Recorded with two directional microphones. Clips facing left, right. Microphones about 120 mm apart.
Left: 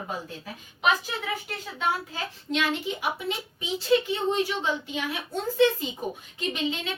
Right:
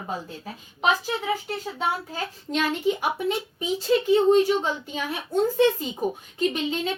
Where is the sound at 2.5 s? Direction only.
45° right (ahead or behind).